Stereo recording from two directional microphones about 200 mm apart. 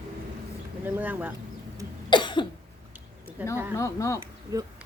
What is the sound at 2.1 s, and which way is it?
Cough, 25° left (ahead or behind).